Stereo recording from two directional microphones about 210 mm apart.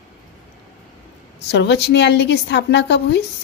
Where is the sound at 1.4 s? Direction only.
55° left (ahead or behind).